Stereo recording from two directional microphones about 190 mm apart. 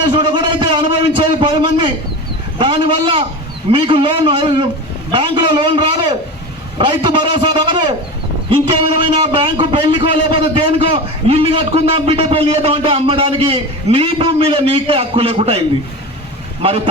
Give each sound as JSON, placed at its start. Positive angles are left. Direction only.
{"t": 0.0, "sound": "a sound", "side_deg": -25}
{"t": 2.6, "sound": "a man's voice", "side_deg": -25}
{"t": 16.6, "sound": "a man's voice", "side_deg": -30}